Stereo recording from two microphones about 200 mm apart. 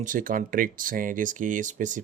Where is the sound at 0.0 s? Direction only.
40° right (ahead or behind).